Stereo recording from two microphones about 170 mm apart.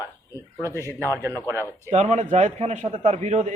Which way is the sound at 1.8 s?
40° right (ahead or behind).